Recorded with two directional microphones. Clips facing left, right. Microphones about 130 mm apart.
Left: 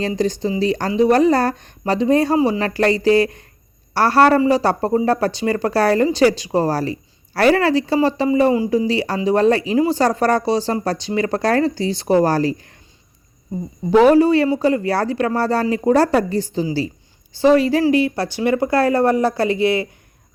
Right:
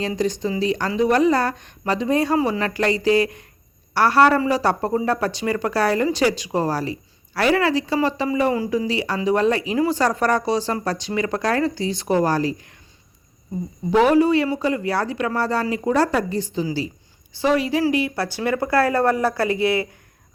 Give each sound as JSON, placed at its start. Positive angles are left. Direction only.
{"t": 0.2, "sound": "speech", "side_deg": 30}
{"t": 13.9, "sound": "speech", "side_deg": 35}
{"t": 18.1, "sound": "speech", "side_deg": 20}